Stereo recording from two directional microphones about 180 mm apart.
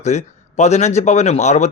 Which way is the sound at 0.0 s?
40° left (ahead or behind).